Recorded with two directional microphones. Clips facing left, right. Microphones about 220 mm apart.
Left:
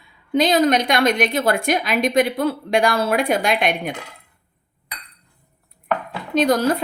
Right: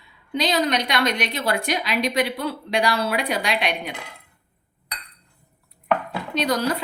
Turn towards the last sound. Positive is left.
turn(degrees=50)  # may be behind; listen again after turning